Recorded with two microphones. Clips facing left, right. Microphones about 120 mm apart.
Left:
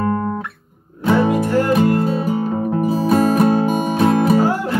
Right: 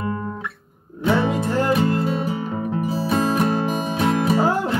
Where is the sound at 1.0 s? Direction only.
40° left (ahead or behind).